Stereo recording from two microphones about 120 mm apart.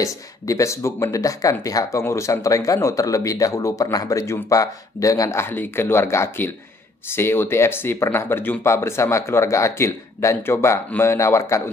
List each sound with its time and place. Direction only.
0.0 s speech: 25° left (ahead or behind)